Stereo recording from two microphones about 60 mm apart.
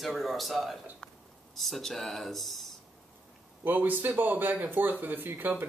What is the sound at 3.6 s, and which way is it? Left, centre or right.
Speech, right.